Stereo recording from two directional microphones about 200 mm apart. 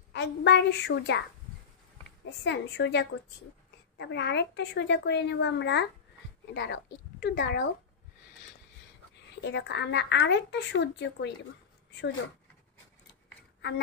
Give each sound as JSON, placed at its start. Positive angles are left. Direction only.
{"t": 0.1, "sound": "a woman's voice", "side_deg": 60}
{"t": 2.4, "sound": "a woman's voice", "side_deg": 60}
{"t": 9.4, "sound": "a woman's voice", "side_deg": 60}